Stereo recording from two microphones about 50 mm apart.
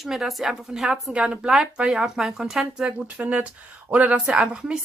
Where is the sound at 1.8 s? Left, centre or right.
Centre.